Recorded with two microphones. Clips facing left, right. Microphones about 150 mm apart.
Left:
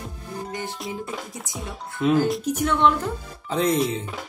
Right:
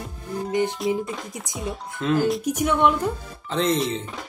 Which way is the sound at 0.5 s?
20° right (ahead or behind).